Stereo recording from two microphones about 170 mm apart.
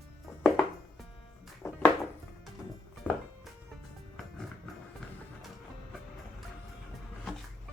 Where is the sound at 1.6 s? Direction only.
15° left (ahead or behind).